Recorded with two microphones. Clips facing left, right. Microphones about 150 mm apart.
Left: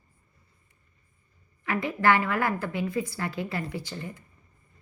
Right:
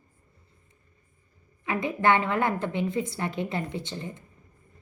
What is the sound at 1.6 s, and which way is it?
A woman's voice, 20° right (ahead or behind).